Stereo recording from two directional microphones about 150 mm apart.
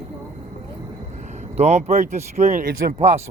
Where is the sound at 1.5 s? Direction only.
45° right (ahead or behind).